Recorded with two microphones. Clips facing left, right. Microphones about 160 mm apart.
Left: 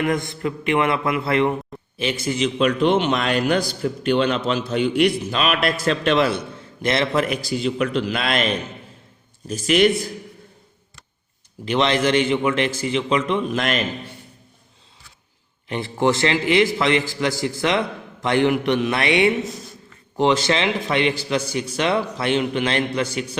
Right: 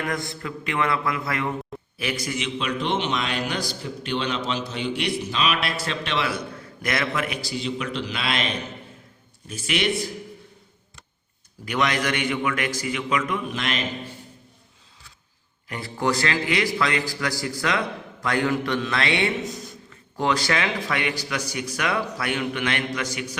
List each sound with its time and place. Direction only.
0.0 s a man's voice: 20° left (ahead or behind)
2.4 s a man's voice: 50° left (ahead or behind)
6.3 s a man's voice: 25° left (ahead or behind)
7.3 s a man's voice: 50° left (ahead or behind)
9.5 s a man's voice: 40° left (ahead or behind)
11.6 s a man's voice: 25° left (ahead or behind)
13.5 s a man's voice: 50° left (ahead or behind)
15.7 s a man's voice: 25° left (ahead or behind)